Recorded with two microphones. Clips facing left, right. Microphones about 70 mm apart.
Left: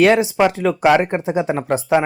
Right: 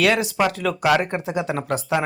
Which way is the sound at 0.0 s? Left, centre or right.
Left.